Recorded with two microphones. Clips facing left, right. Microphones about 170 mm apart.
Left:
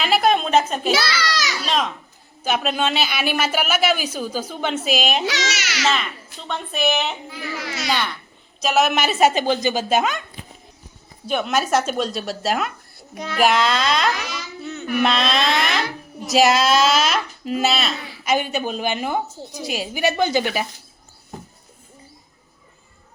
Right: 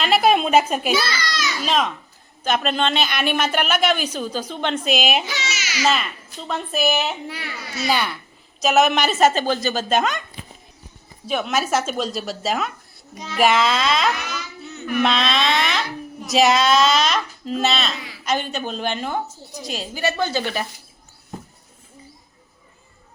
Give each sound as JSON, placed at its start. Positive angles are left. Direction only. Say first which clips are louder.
{"t": 0.0, "sound": "a sound", "louder": "right 1 dB", "side_deg": 0}
{"t": 0.9, "sound": "a sound", "louder": "left 1 dB", "side_deg": 90}
{"t": 1.6, "sound": "a woman's voice", "louder": "right 4 dB", "side_deg": 0}
{"t": 5.2, "sound": "a child's voice", "louder": "left 5 dB", "side_deg": 75}
{"t": 6.5, "sound": "a woman's voice", "louder": "right 1 dB", "side_deg": 0}
{"t": 7.3, "sound": "speech", "louder": "even", "side_deg": -85}
{"t": 7.5, "sound": "a child's voice", "louder": "left 1 dB", "side_deg": 90}
{"t": 7.9, "sound": "a child's voice", "louder": "right 3 dB", "side_deg": -10}
{"t": 11.3, "sound": "a woman's voice", "louder": "left 1 dB", "side_deg": 0}
{"t": 13.1, "sound": "child singing", "louder": "left 3 dB", "side_deg": 60}
{"t": 13.4, "sound": "a woman's voice", "louder": "even", "side_deg": 0}